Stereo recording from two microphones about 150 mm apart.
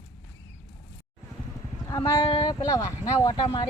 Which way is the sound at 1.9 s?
35° left (ahead or behind).